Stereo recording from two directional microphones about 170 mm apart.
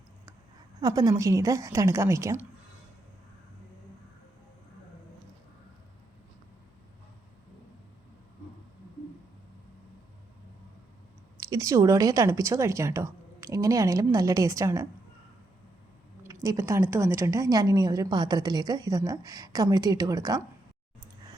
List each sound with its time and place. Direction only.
0.8 s a woman's voice: 20° right (ahead or behind)
11.5 s a woman's voice: 20° right (ahead or behind)
16.2 s a woman's voice: 20° right (ahead or behind)